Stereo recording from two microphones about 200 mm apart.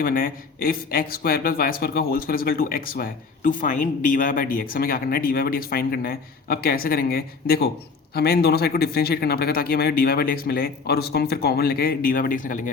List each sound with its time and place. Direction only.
0.0 s speech: 45° left (ahead or behind)